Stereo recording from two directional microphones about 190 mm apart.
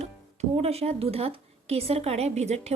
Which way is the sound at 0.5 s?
35° right (ahead or behind).